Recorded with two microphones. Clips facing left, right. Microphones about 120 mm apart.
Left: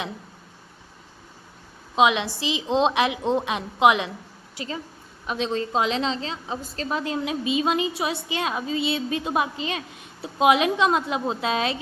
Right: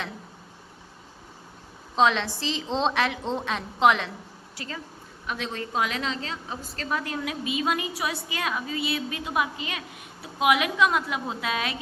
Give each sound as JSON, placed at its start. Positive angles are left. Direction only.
{"t": 2.0, "sound": "a woman's voice", "side_deg": 10}